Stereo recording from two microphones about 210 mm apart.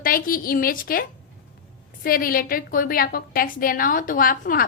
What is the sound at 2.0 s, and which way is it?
A woman's voice, 45° left (ahead or behind).